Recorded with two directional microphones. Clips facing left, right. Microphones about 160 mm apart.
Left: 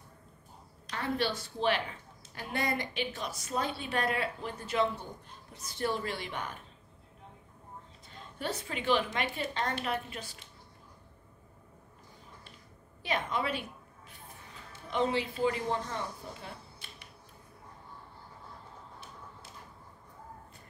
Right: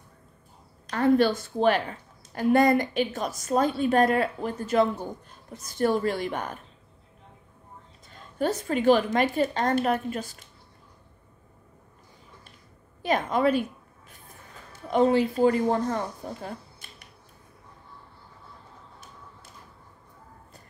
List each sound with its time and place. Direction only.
0.8 s a woman's voice: 45° right (ahead or behind)
8.4 s a woman's voice: 45° right (ahead or behind)
13.0 s speech: 45° right (ahead or behind)